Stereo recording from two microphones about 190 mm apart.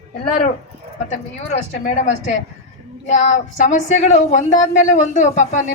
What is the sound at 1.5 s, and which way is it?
Speech, 40° left (ahead or behind).